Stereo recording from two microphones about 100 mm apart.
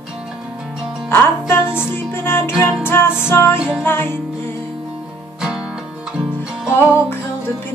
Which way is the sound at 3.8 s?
20° left (ahead or behind).